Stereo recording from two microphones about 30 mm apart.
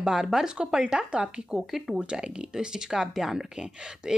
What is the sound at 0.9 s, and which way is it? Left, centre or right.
Speech, right.